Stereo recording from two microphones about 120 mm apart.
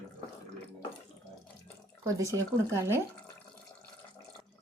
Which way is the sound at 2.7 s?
20° right (ahead or behind).